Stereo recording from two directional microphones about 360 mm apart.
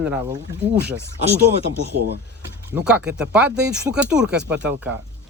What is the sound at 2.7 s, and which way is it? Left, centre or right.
Speech, centre.